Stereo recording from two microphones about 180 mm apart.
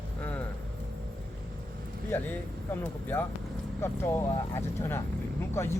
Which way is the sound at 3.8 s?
15° left (ahead or behind).